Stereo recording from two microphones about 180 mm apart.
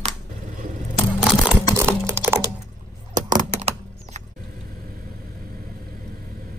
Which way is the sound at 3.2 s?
45° right (ahead or behind).